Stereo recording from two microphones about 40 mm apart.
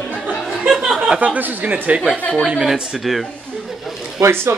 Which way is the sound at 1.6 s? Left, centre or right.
Right.